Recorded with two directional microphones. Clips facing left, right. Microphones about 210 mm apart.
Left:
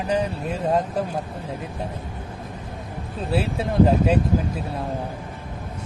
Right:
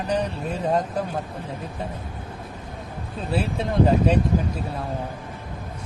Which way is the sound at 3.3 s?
5° left (ahead or behind).